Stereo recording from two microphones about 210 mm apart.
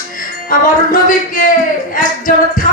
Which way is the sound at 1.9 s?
40° left (ahead or behind).